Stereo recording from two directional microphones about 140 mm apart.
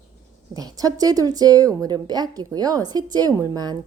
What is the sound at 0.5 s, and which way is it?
A woman's voice, 25° right (ahead or behind).